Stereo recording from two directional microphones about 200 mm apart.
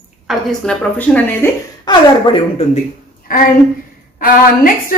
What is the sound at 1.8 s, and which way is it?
Speech, 25° left (ahead or behind).